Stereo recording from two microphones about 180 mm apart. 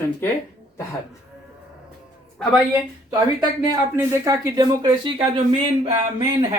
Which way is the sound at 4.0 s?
15° right (ahead or behind).